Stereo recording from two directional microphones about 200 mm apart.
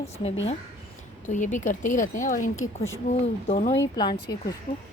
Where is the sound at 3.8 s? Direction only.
20° left (ahead or behind).